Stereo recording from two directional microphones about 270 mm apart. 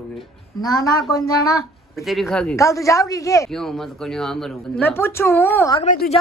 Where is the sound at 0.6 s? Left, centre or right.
Centre.